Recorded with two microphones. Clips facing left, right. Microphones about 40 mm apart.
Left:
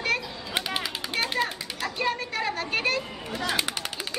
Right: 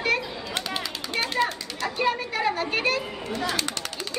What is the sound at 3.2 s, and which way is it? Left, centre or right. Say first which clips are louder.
Speech: right 2 dB; centre.